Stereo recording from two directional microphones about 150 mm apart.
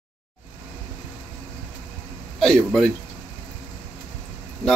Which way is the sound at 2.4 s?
Centre (ahead or behind).